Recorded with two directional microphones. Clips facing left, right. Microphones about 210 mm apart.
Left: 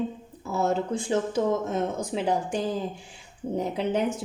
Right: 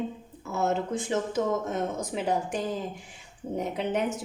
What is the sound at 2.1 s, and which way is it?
Speech, 30° left (ahead or behind).